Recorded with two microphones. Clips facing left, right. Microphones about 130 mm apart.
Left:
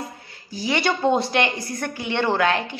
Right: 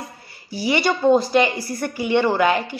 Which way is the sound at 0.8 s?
Centre (ahead or behind).